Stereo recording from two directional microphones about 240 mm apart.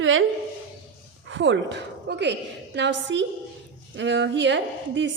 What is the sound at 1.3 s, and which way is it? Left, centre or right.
A woman's voice, right.